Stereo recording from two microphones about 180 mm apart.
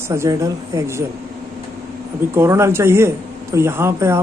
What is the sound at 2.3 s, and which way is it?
A man's voice, 15° right (ahead or behind).